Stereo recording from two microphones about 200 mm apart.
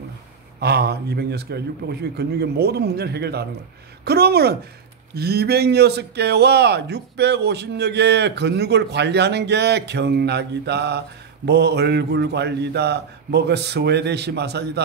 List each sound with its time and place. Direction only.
0.6 s a man's voice: 55° right (ahead or behind)